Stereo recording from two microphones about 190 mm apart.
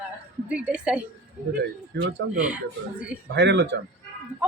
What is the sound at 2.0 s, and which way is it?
Speech, 75° right (ahead or behind).